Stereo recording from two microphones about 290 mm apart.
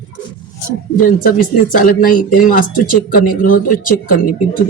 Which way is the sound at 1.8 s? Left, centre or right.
Left.